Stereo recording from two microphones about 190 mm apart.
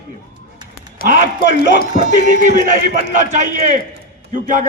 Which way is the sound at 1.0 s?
50° left (ahead or behind).